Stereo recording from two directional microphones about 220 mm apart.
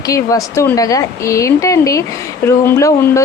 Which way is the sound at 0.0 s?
15° left (ahead or behind).